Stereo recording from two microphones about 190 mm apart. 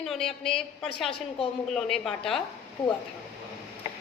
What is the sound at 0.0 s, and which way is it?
A woman's voice, centre (ahead or behind).